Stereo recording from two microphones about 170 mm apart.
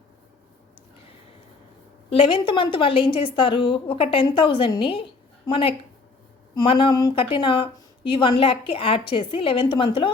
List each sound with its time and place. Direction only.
2.0 s speech: 30° left (ahead or behind)